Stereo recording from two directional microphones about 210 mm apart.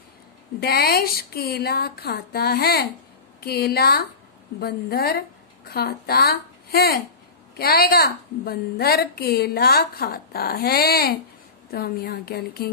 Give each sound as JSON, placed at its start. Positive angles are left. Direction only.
{"t": 0.6, "sound": "a woman's voice", "side_deg": 50}